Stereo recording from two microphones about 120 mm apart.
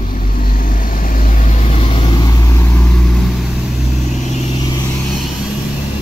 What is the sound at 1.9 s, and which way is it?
Vehicle, 50° left (ahead or behind).